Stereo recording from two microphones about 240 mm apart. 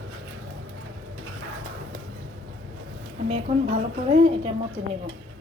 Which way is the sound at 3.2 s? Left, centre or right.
Right.